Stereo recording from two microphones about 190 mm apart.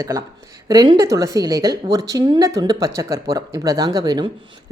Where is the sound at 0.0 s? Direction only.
20° right (ahead or behind).